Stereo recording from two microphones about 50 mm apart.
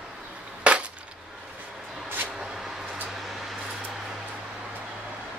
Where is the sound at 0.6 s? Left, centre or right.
Right.